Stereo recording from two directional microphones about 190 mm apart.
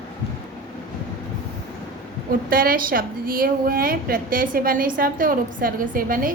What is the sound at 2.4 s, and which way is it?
A woman's voice, 50° right (ahead or behind).